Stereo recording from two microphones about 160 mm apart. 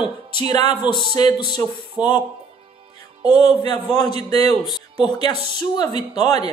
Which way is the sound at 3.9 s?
40° right (ahead or behind).